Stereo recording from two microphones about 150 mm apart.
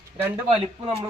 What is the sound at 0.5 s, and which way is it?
Speech, 40° right (ahead or behind).